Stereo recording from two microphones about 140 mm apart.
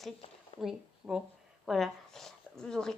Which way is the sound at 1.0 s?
15° right (ahead or behind).